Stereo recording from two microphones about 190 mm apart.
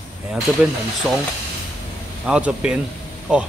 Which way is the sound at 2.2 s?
5° right (ahead or behind).